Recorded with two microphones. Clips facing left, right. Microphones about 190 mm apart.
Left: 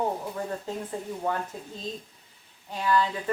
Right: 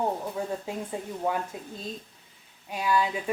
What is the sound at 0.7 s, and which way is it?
Speech, 10° right (ahead or behind).